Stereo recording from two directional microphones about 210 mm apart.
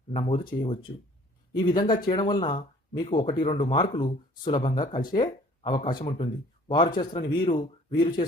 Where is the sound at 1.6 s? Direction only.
20° left (ahead or behind).